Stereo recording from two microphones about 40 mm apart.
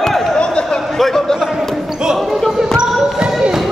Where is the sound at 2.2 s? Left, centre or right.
Centre.